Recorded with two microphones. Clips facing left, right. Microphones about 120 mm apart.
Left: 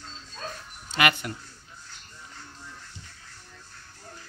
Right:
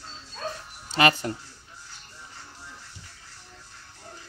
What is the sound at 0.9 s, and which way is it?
Speech, 30° right (ahead or behind).